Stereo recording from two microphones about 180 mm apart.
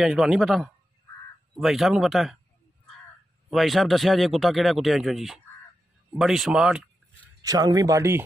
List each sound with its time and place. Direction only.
0.0 s speech: centre (ahead or behind)
3.4 s speech: centre (ahead or behind)
7.4 s speech: 20° right (ahead or behind)